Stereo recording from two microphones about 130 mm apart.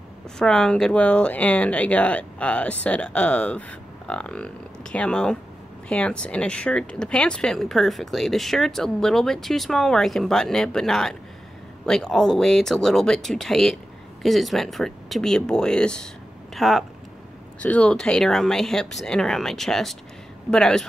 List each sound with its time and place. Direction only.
0.4 s speech: 5° left (ahead or behind)
17.6 s speech: 10° left (ahead or behind)